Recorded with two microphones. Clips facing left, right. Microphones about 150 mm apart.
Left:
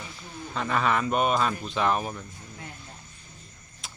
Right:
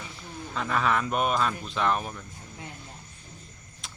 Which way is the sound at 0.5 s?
Centre (ahead or behind).